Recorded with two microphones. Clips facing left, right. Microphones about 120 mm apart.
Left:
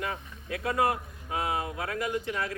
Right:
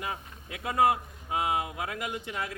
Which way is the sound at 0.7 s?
15° right (ahead or behind).